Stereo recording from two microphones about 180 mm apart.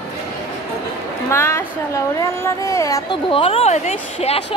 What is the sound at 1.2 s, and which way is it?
A woman's voice, 15° left (ahead or behind).